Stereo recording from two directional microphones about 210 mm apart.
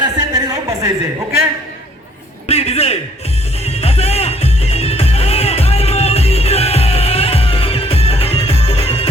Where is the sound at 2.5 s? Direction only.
30° left (ahead or behind).